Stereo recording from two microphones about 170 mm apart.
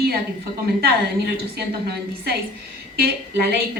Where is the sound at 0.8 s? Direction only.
70° right (ahead or behind).